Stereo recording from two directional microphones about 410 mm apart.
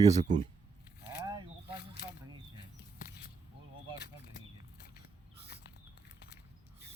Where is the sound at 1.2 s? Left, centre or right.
Centre.